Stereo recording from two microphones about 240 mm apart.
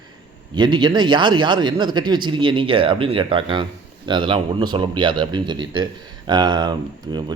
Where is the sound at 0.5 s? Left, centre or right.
Centre.